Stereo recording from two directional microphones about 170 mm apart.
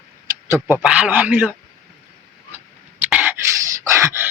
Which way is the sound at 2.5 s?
10° right (ahead or behind).